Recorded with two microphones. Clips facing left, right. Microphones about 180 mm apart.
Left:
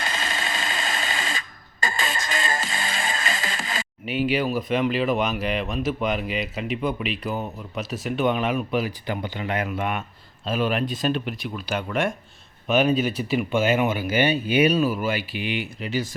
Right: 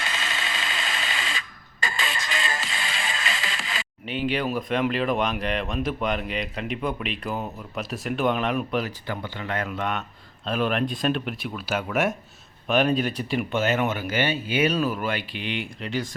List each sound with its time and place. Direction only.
0.0 s a sound: 45° left (ahead or behind)
4.0 s speech: 5° left (ahead or behind)
9.0 s speech: 15° left (ahead or behind)